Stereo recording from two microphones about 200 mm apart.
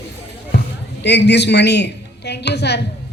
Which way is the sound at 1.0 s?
60° left (ahead or behind).